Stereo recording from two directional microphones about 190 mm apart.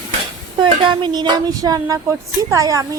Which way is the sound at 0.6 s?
25° right (ahead or behind).